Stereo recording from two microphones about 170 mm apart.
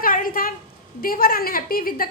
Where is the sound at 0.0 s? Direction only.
55° left (ahead or behind).